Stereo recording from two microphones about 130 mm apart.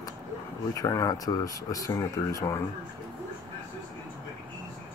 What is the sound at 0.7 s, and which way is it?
Speech, 25° left (ahead or behind).